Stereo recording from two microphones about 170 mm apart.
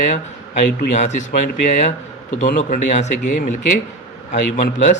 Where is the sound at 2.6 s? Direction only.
45° left (ahead or behind).